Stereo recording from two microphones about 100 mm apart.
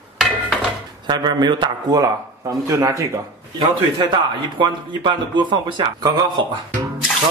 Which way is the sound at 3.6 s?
55° right (ahead or behind).